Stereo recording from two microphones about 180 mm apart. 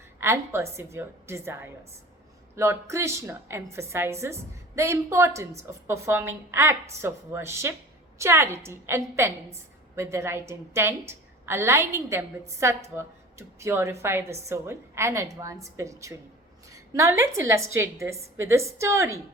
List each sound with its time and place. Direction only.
0.2 s a woman's voice: 15° right (ahead or behind)